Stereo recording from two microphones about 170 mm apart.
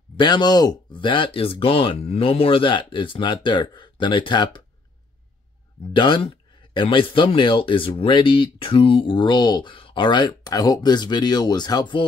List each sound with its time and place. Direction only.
0.2 s speech: 25° left (ahead or behind)
5.9 s speech: 30° left (ahead or behind)